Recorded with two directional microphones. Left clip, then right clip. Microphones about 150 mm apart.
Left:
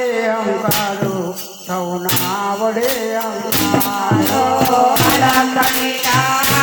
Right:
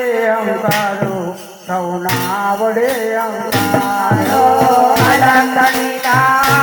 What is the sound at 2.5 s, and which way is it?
Music, 30° right (ahead or behind).